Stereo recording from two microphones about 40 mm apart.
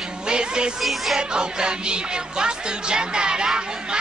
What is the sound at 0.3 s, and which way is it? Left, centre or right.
Music, right.